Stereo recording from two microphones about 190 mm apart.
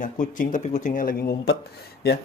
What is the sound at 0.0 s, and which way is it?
Speech, 45° left (ahead or behind).